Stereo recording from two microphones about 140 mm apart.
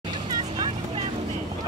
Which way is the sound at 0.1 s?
30° right (ahead or behind).